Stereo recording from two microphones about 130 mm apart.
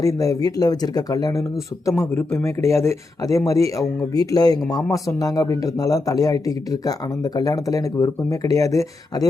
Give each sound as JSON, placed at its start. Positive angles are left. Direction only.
{"t": 0.0, "sound": "speech", "side_deg": 25}